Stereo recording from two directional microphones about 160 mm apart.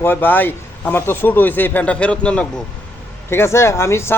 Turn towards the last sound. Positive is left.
turn(degrees=15)  # may be behind; listen again after turning